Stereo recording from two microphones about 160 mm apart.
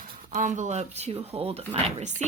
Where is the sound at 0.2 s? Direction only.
55° right (ahead or behind).